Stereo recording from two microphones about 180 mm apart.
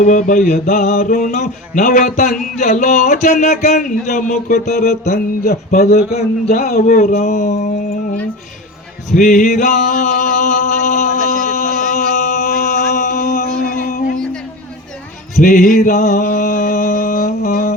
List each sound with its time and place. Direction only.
0.0 s speech: 45° left (ahead or behind)
6.7 s speech: 50° left (ahead or behind)
9.0 s a sound: 45° left (ahead or behind)
15.4 s mantra: 45° left (ahead or behind)